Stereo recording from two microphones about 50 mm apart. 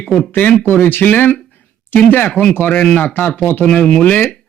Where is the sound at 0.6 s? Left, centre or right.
Left.